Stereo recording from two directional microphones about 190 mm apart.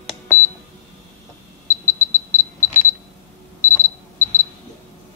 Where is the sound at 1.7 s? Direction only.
15° left (ahead or behind).